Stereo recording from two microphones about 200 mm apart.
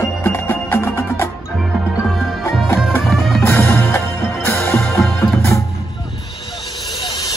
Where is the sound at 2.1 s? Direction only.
Centre (ahead or behind).